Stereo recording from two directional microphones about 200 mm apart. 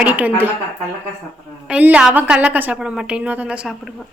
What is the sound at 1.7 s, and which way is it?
A woman's voice, 5° right (ahead or behind).